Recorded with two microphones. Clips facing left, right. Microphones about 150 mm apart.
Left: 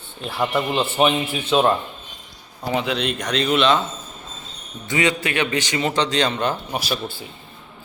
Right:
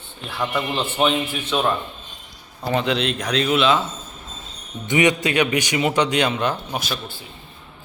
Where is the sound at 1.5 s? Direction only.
25° left (ahead or behind).